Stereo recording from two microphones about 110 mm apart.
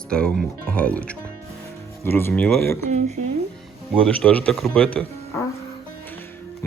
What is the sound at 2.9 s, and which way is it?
Speech, 90° right.